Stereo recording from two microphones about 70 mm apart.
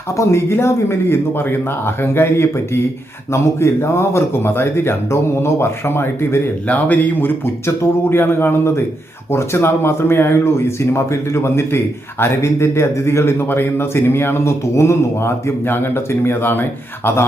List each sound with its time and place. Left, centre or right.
0.2 s a man's voice: left
6.7 s a man's voice: left